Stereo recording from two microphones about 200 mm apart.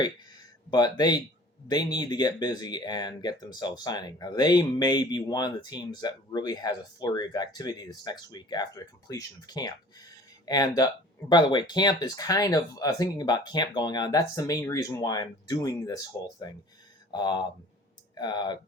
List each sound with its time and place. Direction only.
0.7 s speech: 20° left (ahead or behind)